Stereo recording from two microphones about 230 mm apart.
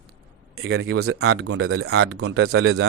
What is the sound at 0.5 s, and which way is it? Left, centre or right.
Speech, right.